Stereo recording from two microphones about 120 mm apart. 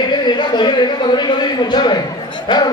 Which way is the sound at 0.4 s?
40° left (ahead or behind).